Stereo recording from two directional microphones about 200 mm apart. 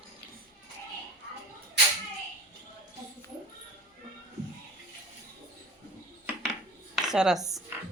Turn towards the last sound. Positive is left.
turn(degrees=-5)  # may be behind; listen again after turning